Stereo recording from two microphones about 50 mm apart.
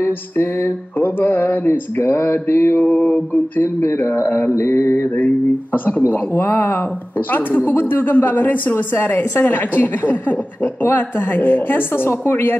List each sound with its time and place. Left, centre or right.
0.0 s a sound: left
0.9 s a woman's voice: left
1.7 s a woman's voice: left
2.8 s a woman's voice: left
3.6 s a woman's voice: left